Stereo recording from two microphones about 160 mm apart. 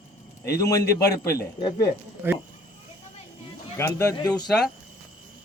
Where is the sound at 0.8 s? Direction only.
80° left.